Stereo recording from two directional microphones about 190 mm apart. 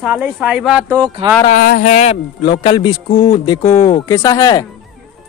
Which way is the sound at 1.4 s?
45° left (ahead or behind).